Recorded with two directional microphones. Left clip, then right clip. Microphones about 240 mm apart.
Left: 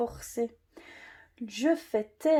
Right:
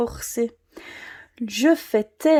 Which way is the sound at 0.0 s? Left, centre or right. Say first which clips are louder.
Right 7 dB; right.